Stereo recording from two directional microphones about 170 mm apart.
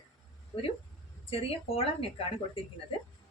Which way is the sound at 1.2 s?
35° left (ahead or behind).